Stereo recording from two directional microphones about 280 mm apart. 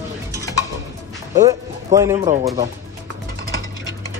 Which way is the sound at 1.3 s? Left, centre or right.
Centre.